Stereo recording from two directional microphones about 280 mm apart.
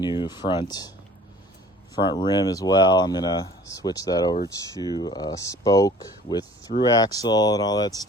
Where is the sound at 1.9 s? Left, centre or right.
Centre.